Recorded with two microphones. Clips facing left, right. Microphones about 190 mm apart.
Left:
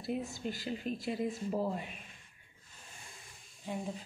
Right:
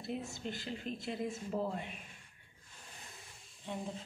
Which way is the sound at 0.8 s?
50° left (ahead or behind).